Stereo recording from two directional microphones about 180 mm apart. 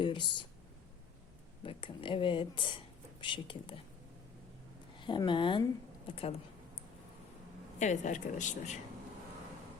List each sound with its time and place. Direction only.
0.0 s speech: 25° left (ahead or behind)
1.6 s speech: 30° left (ahead or behind)
4.9 s speech: 25° left (ahead or behind)
7.8 s a woman's voice: 40° left (ahead or behind)